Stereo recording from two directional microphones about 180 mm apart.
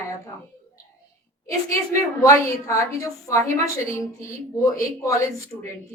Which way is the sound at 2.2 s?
15° left (ahead or behind).